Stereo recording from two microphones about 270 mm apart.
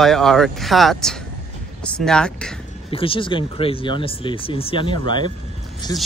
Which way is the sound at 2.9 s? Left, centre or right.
Centre.